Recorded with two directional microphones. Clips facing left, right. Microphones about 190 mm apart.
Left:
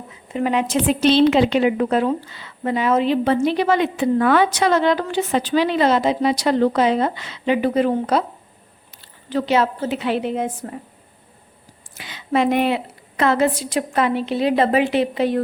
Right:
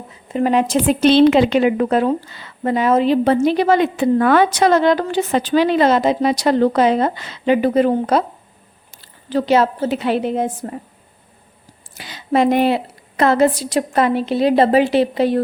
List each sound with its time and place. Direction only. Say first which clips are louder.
0.3 s a woman's voice: right 4 dB; 40° right (ahead or behind)
0.9 s a woman's voice: right 3 dB; 55° right (ahead or behind); by 10.7 s 35° right (ahead or behind)
11.9 s a woman's voice: right 3 dB; 35° right (ahead or behind)